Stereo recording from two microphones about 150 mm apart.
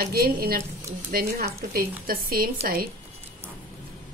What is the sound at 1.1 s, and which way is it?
A woman's voice, 80° right.